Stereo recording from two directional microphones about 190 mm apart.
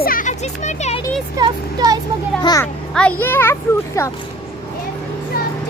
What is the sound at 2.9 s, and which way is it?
Speech, 5° left (ahead or behind).